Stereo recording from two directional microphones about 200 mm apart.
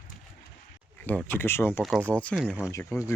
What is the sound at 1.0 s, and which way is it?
Speech, 10° left (ahead or behind).